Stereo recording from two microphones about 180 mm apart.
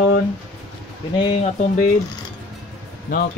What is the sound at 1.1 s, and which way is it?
Speech, 35° left (ahead or behind).